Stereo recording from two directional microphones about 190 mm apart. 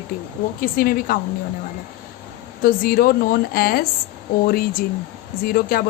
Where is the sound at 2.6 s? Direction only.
50° left (ahead or behind).